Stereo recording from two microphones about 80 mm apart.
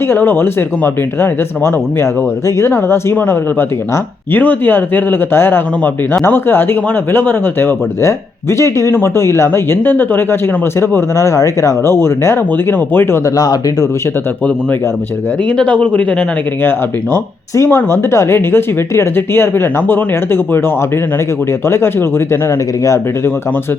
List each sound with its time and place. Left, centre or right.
0.1 s speech: left
8.0 s speech: left
10.8 s speech: left
13.2 s speech: left
15.4 s speech: centre
17.6 s speech: left
22.8 s speech: left